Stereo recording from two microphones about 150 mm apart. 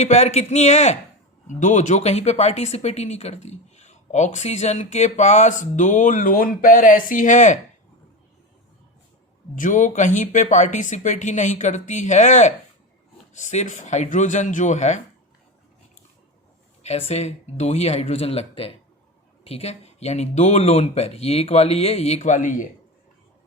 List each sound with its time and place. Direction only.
0.0 s speech: 50° left (ahead or behind)
9.6 s speech: 60° left (ahead or behind)
16.8 s speech: 45° left (ahead or behind)